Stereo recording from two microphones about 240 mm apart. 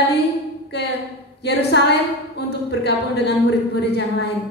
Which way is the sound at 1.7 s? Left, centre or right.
Left.